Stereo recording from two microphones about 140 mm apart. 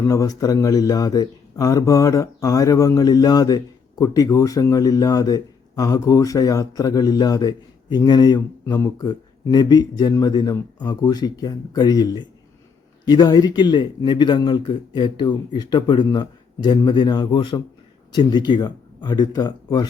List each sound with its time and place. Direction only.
0.1 s a man's voice: 25° left (ahead or behind)